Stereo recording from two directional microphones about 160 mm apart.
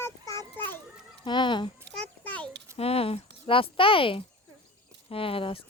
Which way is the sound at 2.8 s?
35° left (ahead or behind).